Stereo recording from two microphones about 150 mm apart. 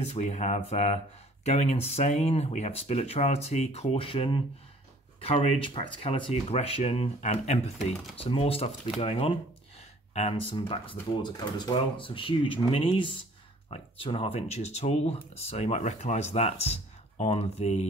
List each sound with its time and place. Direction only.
0.0 s speech: 50° left (ahead or behind)
8.2 s speech: 40° left (ahead or behind)
10.5 s speech: 35° left (ahead or behind)